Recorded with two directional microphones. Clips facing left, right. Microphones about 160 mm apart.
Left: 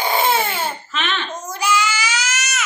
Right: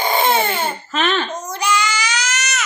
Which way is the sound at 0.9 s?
40° right (ahead or behind).